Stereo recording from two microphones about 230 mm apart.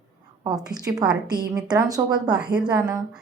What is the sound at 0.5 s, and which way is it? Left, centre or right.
Speech, centre.